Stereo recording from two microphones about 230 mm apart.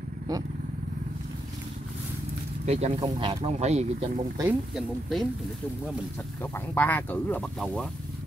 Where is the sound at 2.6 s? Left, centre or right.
Right.